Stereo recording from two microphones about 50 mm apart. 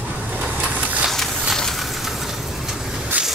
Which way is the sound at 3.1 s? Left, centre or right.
Right.